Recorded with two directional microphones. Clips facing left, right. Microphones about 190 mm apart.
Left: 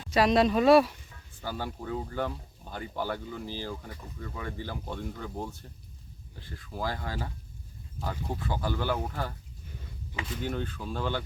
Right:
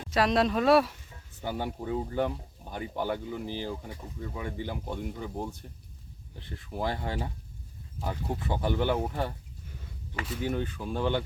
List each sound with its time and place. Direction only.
0.1 s speech: centre (ahead or behind)
1.4 s speech: 20° right (ahead or behind)
7.9 s speech: 10° right (ahead or behind)
10.2 s speech: 10° right (ahead or behind)